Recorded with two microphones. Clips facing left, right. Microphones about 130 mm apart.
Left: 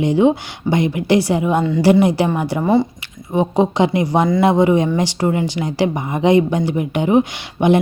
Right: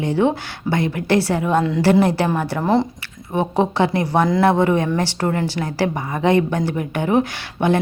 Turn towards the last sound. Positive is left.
turn(degrees=15)  # may be behind; listen again after turning